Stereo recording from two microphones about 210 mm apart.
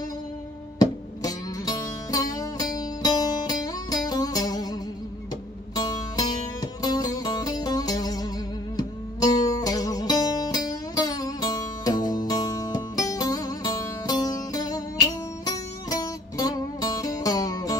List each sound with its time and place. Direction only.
0.7 s music: 20° left (ahead or behind)
5.8 s music: 20° left (ahead or behind)